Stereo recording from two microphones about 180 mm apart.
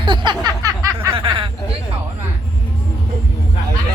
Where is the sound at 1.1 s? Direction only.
30° right (ahead or behind).